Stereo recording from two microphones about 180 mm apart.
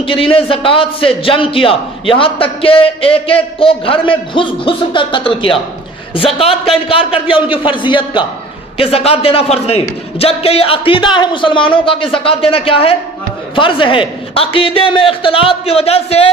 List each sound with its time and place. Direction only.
0.0 s a man's voice: 30° left (ahead or behind)